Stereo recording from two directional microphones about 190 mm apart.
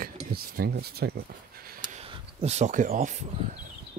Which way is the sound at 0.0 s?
50° right (ahead or behind).